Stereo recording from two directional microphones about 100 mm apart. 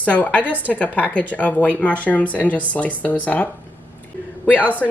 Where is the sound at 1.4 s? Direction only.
15° left (ahead or behind).